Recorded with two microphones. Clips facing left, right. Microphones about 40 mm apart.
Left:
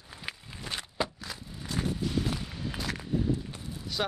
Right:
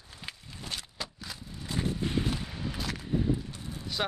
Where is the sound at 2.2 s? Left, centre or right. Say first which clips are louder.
Even; centre.